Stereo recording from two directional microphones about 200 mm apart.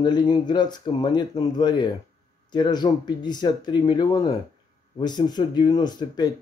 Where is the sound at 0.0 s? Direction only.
20° left (ahead or behind).